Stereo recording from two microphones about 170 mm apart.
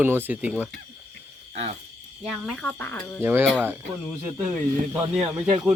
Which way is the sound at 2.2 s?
Centre (ahead or behind).